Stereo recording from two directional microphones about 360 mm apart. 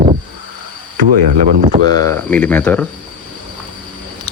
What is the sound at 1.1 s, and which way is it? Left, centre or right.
Speech, centre.